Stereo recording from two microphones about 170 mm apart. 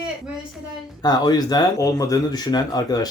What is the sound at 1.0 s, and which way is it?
Speech, 25° left (ahead or behind).